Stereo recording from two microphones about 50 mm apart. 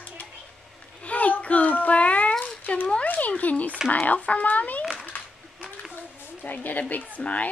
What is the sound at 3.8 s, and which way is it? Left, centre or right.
Speech, left.